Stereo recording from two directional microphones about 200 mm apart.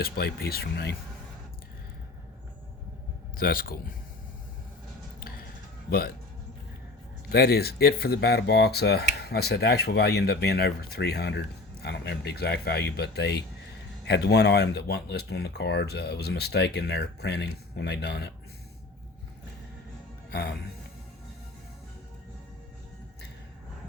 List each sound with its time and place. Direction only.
0.0 s speech: 50° left (ahead or behind)
3.3 s speech: 45° left (ahead or behind)
7.3 s speech: 50° left (ahead or behind)